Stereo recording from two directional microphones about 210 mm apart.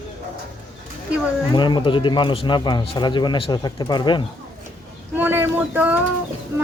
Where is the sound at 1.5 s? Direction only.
20° left (ahead or behind).